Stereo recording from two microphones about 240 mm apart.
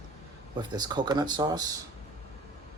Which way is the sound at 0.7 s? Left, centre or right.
Centre.